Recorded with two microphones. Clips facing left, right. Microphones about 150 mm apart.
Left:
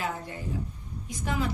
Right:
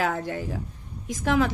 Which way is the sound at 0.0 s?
80° right.